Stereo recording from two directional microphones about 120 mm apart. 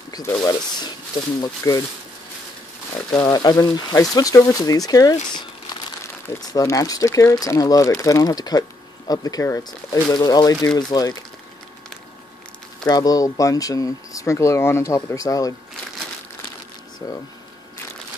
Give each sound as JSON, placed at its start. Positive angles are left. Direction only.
{"t": 0.1, "sound": "speech", "side_deg": 30}
{"t": 3.2, "sound": "speech", "side_deg": 35}
{"t": 6.5, "sound": "speech", "side_deg": 30}
{"t": 12.8, "sound": "speech", "side_deg": 35}